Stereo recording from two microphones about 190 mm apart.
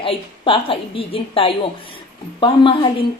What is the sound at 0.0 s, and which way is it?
Speech, 30° left (ahead or behind).